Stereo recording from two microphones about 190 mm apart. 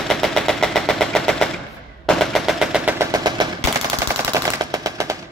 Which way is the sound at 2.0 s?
Centre (ahead or behind).